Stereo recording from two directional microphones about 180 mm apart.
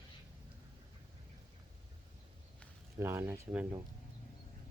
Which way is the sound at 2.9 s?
15° right (ahead or behind).